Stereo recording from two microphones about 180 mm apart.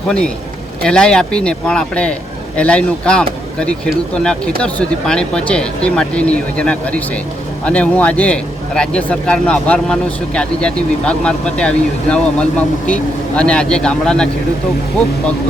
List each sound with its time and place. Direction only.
0.9 s a man's voice: 5° left (ahead or behind)